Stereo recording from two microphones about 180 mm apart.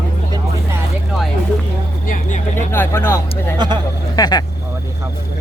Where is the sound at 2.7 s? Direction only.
10° left (ahead or behind).